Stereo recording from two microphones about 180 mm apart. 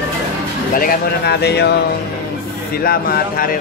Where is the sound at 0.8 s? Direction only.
60° left (ahead or behind).